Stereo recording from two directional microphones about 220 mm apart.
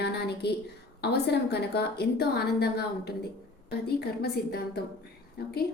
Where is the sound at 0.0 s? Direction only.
50° left (ahead or behind).